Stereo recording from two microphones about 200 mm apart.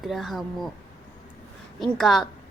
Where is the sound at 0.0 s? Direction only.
Centre (ahead or behind).